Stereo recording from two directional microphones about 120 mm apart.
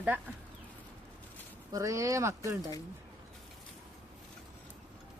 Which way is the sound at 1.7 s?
25° right (ahead or behind).